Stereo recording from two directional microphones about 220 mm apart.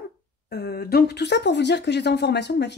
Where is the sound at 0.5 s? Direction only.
45° left (ahead or behind).